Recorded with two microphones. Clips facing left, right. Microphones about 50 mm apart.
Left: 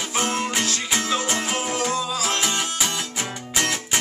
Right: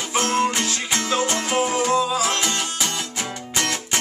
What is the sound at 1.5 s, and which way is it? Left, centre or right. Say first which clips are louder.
Music: right 9 dB; centre.